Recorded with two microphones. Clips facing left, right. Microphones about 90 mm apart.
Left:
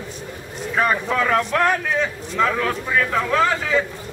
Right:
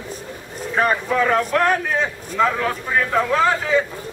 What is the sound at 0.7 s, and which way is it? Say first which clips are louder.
A man's voice: right 1 dB; 5° right (ahead or behind).